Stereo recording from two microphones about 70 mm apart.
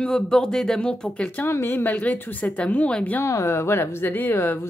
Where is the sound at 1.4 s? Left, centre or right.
Left; by 3.1 s centre.